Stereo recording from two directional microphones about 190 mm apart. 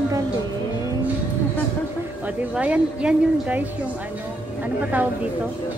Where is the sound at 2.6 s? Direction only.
5° right (ahead or behind).